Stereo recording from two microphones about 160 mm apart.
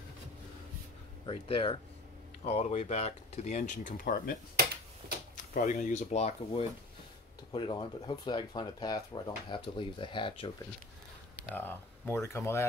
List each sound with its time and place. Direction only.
1.2 s speech: 35° left (ahead or behind)
11.5 s speech: 15° left (ahead or behind)